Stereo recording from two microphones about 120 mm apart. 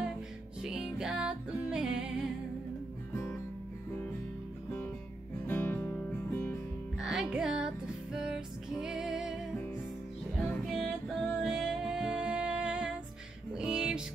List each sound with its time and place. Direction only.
0.6 s music: 5° right (ahead or behind)
5.5 s music: 15° left (ahead or behind)
7.0 s music: 5° right (ahead or behind)
10.7 s music: centre (ahead or behind)